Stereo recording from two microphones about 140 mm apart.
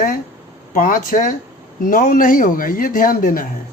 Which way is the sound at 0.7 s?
85° left.